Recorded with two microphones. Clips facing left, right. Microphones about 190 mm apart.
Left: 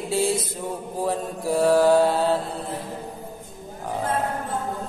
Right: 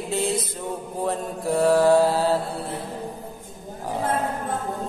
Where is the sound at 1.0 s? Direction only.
Centre (ahead or behind).